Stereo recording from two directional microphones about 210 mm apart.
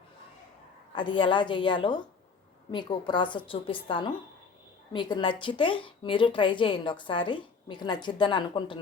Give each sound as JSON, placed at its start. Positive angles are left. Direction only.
{"t": 0.9, "sound": "speech", "side_deg": 25}